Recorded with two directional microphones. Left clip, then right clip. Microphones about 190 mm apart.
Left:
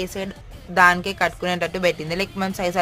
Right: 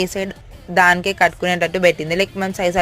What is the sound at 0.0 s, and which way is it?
A woman's voice, 25° right (ahead or behind).